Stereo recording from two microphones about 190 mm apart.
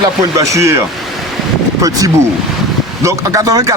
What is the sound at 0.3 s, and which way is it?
Speech, 15° right (ahead or behind).